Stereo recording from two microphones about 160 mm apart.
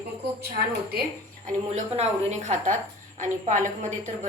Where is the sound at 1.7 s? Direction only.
45° right (ahead or behind).